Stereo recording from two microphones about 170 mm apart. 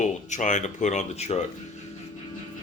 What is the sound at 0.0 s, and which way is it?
Speech, 45° left (ahead or behind).